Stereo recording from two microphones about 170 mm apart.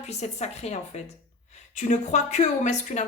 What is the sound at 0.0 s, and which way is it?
A woman's voice, 40° left (ahead or behind).